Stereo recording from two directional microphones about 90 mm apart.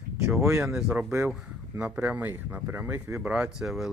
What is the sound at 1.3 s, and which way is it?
Speech, 5° right (ahead or behind).